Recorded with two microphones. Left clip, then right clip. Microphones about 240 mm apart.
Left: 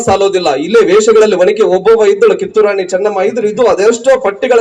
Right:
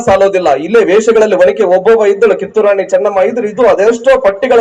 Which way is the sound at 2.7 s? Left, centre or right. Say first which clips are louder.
Right 3 dB; left.